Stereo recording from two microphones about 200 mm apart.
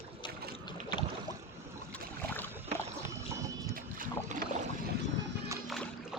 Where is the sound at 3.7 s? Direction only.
45° right (ahead or behind).